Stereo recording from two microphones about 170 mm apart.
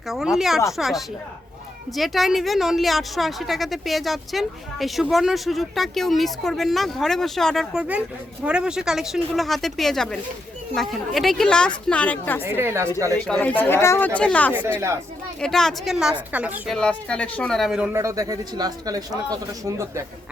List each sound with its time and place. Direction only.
0.3 s a woman's voice: centre (ahead or behind)
12.5 s speech: 15° right (ahead or behind)
13.1 s a woman's voice: 5° left (ahead or behind)
17.9 s speech: 20° right (ahead or behind)